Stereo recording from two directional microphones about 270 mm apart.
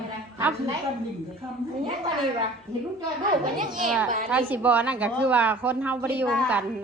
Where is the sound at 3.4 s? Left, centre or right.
Centre.